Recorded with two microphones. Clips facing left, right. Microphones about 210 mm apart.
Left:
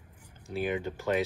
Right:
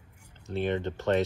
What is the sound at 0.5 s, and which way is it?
Speech, 5° left (ahead or behind).